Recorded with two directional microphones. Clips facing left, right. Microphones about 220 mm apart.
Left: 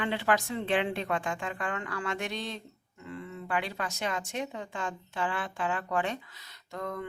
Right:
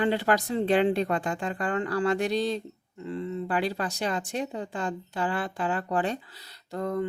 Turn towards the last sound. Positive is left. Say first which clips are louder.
# right 7 dB
turn(degrees=-35)  # may be behind; listen again after turning